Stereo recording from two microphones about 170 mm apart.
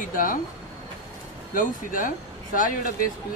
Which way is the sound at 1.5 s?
50° left (ahead or behind).